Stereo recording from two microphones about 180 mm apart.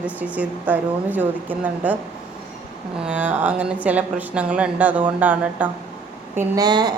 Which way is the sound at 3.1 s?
10° right (ahead or behind).